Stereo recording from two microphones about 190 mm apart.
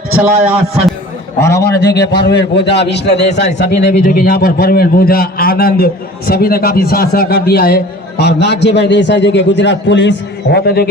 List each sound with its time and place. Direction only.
0.2 s a man's voice: 10° right (ahead or behind)
1.4 s a man's voice: 15° left (ahead or behind)
1.6 s a man's voice: 60° left (ahead or behind)
4.0 s a man's voice: 50° left (ahead or behind)